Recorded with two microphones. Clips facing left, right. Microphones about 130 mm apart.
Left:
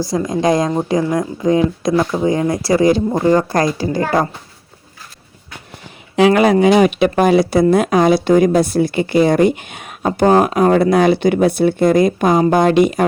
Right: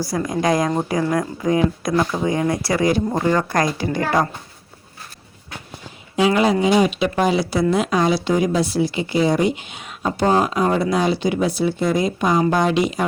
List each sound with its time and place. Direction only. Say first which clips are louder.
0.1 s speech: left 4 dB; 25° left (ahead or behind)
6.1 s speech: left 6 dB; 65° left (ahead or behind)